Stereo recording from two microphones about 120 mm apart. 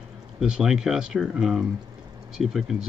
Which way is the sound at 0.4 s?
5° right (ahead or behind).